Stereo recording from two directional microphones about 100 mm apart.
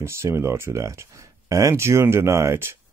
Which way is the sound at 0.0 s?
25° right (ahead or behind).